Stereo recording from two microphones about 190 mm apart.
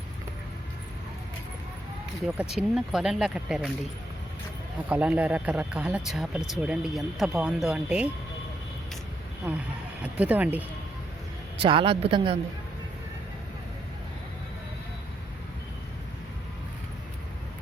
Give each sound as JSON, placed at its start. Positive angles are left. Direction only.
{"t": 2.2, "sound": "speech", "side_deg": -5}
{"t": 4.9, "sound": "speech", "side_deg": -10}
{"t": 9.5, "sound": "speech", "side_deg": -10}
{"t": 11.6, "sound": "speech", "side_deg": -25}